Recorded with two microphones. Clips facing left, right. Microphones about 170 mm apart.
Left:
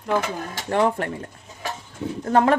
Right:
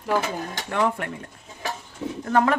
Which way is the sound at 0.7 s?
35° left (ahead or behind).